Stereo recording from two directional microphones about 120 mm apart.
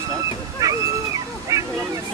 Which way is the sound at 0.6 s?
30° right (ahead or behind).